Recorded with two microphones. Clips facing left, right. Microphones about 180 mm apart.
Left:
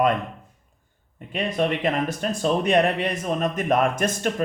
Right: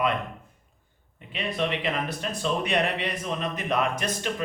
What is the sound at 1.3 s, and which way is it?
Speech, 45° left (ahead or behind).